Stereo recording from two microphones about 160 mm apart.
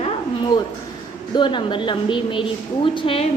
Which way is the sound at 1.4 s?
30° left (ahead or behind).